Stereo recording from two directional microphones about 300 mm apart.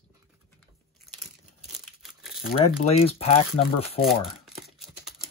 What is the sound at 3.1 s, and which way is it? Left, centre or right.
Speech, centre.